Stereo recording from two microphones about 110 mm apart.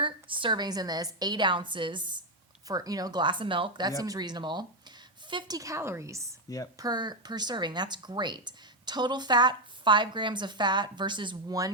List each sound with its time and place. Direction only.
0.0 s speech: 50° right (ahead or behind)
2.6 s speech: 35° right (ahead or behind)
5.5 s a woman's voice: 30° right (ahead or behind)
6.7 s speech: 40° right (ahead or behind)